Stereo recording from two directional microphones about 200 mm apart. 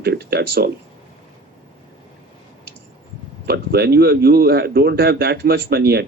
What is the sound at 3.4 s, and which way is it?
Speech, 55° right (ahead or behind).